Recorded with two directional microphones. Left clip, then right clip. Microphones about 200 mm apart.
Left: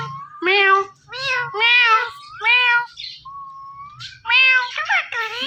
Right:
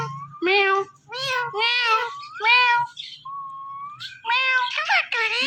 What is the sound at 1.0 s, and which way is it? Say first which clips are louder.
Meow: left 3 dB; 35° right (ahead or behind).